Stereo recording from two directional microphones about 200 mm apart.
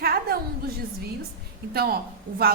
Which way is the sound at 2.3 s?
45° right (ahead or behind).